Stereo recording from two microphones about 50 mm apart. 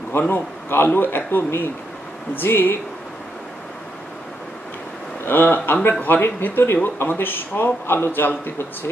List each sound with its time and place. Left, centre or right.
0.3 s speech: left
5.2 s speech: left
6.2 s speech: left